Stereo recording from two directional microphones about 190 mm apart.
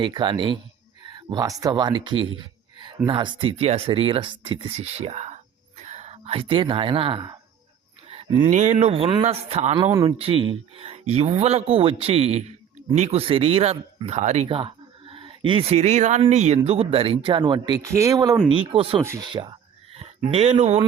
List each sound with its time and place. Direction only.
0.0 s speech: 25° right (ahead or behind)
2.4 s a sound: 25° right (ahead or behind)
3.1 s speech: 25° right (ahead or behind)
8.1 s a sound: 30° right (ahead or behind)
8.4 s speech: 40° right (ahead or behind)
9.9 s speech: 20° right (ahead or behind)
10.2 s speech: 30° right (ahead or behind)
18.4 s speech: 30° right (ahead or behind)
19.0 s speech: 20° right (ahead or behind); by 20.8 s 35° right (ahead or behind)